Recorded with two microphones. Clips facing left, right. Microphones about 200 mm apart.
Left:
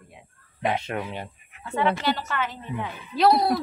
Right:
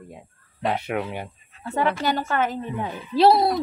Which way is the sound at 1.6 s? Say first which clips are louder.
Right 1 dB; 40° right (ahead or behind).